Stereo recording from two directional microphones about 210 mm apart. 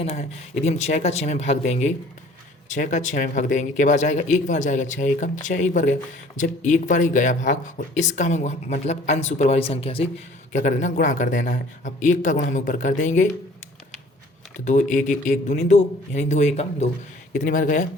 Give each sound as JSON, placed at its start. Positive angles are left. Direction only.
{"t": 0.0, "sound": "speech", "side_deg": 30}
{"t": 14.6, "sound": "speech", "side_deg": 35}